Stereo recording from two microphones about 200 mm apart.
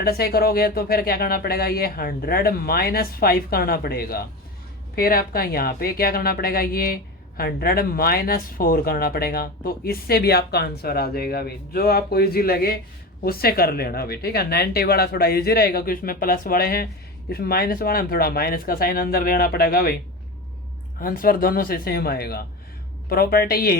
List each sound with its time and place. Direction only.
0.0 s a woman's voice: 50° left (ahead or behind)
21.0 s a woman's voice: 45° left (ahead or behind)